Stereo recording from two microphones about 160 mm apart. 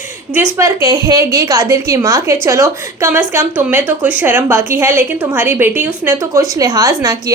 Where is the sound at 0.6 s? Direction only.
20° right (ahead or behind).